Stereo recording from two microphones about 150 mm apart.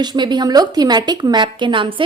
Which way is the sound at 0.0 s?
30° right (ahead or behind).